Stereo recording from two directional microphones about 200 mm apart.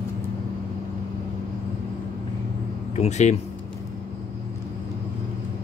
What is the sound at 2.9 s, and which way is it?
Speech, 35° left (ahead or behind).